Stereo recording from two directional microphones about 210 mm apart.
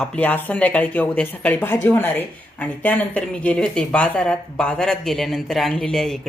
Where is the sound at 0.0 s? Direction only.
5° left (ahead or behind).